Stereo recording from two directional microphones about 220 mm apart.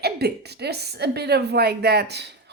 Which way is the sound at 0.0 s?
45° right (ahead or behind).